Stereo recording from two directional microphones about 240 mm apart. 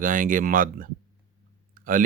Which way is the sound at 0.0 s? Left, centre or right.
Right.